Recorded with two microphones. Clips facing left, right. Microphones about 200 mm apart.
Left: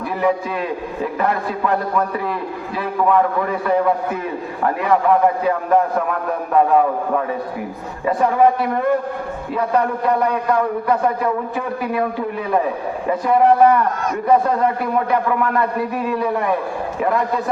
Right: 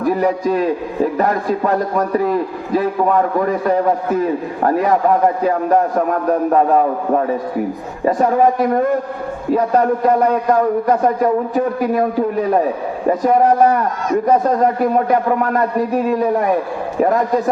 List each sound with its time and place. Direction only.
0.0 s a man's voice: 40° right (ahead or behind)